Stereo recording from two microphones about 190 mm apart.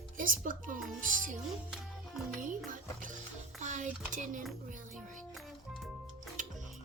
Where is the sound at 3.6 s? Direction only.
40° right (ahead or behind).